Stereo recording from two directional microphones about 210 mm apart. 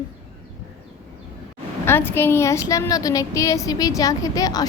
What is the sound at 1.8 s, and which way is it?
A woman's voice, 10° left (ahead or behind).